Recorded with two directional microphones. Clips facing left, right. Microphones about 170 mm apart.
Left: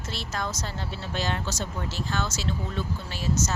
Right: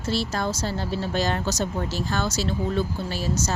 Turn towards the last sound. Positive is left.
turn(degrees=-35)  # may be behind; listen again after turning